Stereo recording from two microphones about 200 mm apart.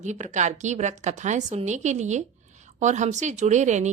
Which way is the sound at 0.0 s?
35° right (ahead or behind).